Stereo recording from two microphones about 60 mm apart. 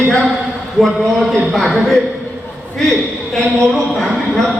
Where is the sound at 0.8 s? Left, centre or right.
Centre.